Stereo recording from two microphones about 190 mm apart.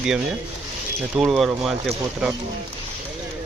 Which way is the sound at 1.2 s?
Centre (ahead or behind).